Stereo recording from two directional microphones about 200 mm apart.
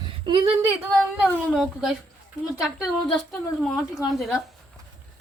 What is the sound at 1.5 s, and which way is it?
A woman's voice, centre (ahead or behind).